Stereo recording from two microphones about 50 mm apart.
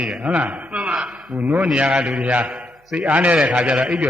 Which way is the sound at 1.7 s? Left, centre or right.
Right.